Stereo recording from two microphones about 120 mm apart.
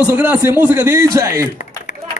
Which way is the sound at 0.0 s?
15° right (ahead or behind).